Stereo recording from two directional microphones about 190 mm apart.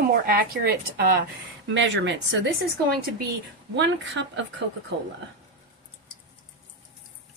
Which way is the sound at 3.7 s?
70° right (ahead or behind).